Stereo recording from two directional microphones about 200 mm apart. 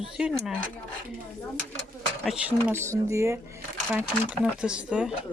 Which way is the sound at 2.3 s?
5° right (ahead or behind).